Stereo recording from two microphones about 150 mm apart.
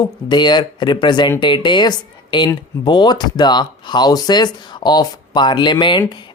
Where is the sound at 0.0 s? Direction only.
30° left (ahead or behind).